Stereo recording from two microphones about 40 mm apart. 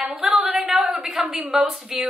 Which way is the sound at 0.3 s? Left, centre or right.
Centre.